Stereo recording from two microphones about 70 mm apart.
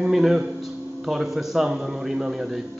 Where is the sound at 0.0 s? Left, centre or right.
Centre.